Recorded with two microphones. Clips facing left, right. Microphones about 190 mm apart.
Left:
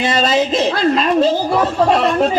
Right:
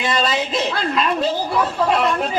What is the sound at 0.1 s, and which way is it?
A man's voice, 35° left (ahead or behind).